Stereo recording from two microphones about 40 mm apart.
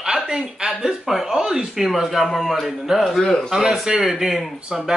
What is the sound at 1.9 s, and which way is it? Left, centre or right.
Speech, centre.